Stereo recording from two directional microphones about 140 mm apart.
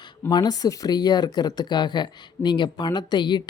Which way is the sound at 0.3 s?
30° left (ahead or behind).